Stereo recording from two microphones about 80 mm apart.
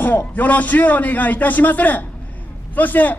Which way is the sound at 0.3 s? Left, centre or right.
Left.